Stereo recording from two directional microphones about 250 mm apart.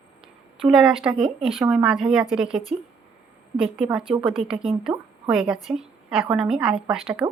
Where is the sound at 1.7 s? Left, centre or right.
Centre.